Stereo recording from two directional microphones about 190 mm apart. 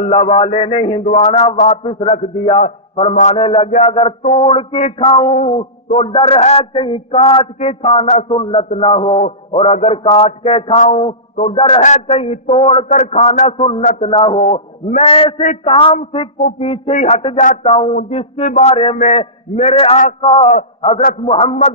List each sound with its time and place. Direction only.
0.0 s mantra: 30° left (ahead or behind)
5.9 s a man's voice: 30° left (ahead or behind)
9.5 s mantra: 30° left (ahead or behind)
14.5 s a man's voice: 35° left (ahead or behind)
16.9 s mantra: 35° left (ahead or behind)
17.4 s a sound: 45° left (ahead or behind)
18.1 s mantra: 35° left (ahead or behind)
20.5 s a man's voice: 30° left (ahead or behind)